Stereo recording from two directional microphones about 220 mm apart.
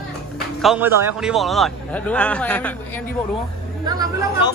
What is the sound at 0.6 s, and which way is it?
A man's voice, 5° right (ahead or behind).